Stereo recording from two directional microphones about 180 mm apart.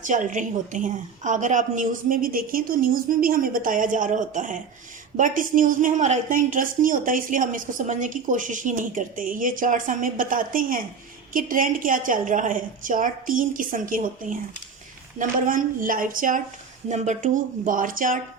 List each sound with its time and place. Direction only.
0.1 s a woman's voice: 45° right (ahead or behind)